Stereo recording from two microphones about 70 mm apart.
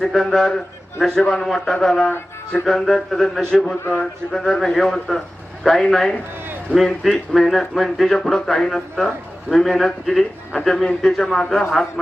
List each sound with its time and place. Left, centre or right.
0.0 s a man's voice: centre